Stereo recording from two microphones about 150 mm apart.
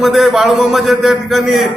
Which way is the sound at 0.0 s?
Centre (ahead or behind).